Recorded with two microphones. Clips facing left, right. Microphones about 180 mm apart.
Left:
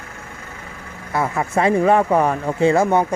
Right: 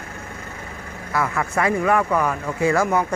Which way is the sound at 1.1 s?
25° left (ahead or behind).